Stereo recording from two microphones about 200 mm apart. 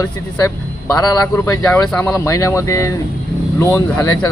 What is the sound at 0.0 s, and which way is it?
A man's voice, 15° left (ahead or behind).